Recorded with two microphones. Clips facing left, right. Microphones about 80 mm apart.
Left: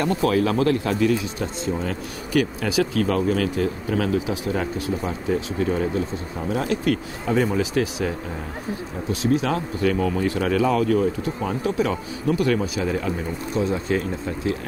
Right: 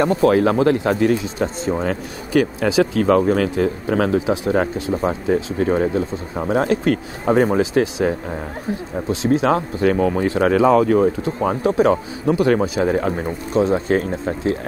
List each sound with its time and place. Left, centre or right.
0.1 s speech: right
0.9 s speech: right
2.3 s speech: right
9.1 s speech: right